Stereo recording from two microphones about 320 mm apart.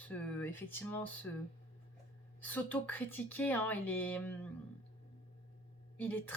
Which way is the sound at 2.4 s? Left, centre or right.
Centre.